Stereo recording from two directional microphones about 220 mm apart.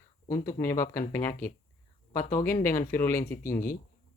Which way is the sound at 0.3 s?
15° left (ahead or behind).